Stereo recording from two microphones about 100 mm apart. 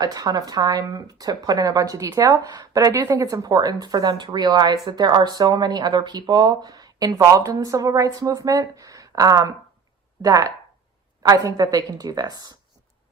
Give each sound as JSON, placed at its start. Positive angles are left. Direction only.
{"t": 0.0, "sound": "speech", "side_deg": -40}